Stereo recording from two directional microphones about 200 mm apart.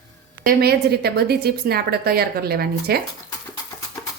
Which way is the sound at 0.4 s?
55° right (ahead or behind).